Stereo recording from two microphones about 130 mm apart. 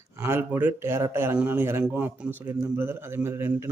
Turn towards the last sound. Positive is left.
turn(degrees=-20)  # may be behind; listen again after turning